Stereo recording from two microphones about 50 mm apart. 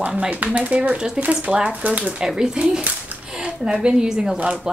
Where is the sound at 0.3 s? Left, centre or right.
Right.